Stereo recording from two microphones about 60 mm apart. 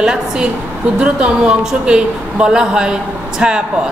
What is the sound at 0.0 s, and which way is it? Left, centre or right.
A woman's voice, centre.